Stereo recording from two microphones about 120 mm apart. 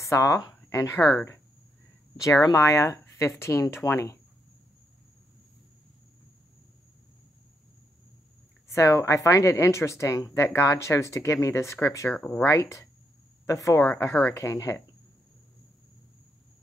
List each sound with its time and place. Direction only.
0.0 s speech: 25° left (ahead or behind)
2.1 s speech: 25° left (ahead or behind)
8.7 s speech: 25° left (ahead or behind)
12.1 s speech: 10° left (ahead or behind)
12.4 s speech: 25° left (ahead or behind)